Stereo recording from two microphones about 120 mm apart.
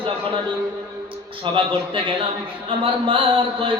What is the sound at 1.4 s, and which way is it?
Speech, 45° right (ahead or behind).